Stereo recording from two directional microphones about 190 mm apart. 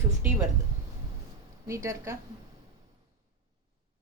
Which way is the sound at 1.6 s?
15° right (ahead or behind).